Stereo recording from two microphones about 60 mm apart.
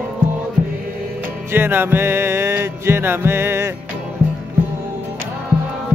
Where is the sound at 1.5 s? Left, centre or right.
Right.